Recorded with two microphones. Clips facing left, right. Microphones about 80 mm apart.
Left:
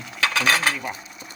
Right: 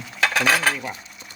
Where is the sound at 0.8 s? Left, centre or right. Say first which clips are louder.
Left 1 dB; left.